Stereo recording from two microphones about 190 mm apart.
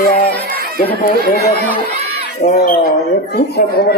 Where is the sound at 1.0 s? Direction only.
50° left (ahead or behind).